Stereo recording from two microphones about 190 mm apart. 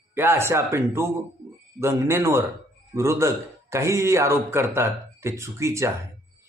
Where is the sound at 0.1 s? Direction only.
10° right (ahead or behind).